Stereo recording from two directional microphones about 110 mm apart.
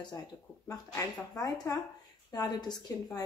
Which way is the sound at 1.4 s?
35° left (ahead or behind).